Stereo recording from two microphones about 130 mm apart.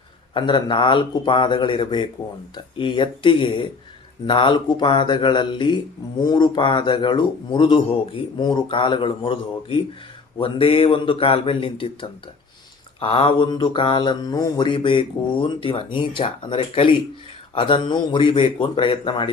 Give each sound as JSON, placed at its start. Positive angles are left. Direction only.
{"t": 0.3, "sound": "speech", "side_deg": 40}